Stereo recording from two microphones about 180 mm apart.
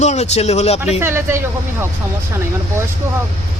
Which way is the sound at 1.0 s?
15° right (ahead or behind).